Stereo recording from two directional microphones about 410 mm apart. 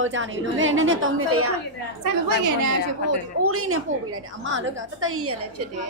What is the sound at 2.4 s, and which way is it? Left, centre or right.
A woman's voice, right.